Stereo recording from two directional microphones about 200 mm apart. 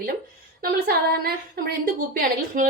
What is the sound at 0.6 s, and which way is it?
A woman's voice, 45° right (ahead or behind).